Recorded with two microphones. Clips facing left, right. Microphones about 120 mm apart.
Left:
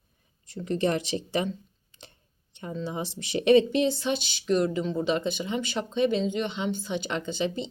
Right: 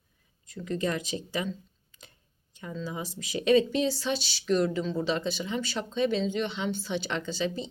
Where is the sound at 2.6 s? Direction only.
25° left (ahead or behind).